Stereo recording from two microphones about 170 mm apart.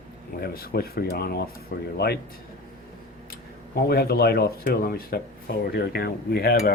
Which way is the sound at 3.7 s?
65° left (ahead or behind).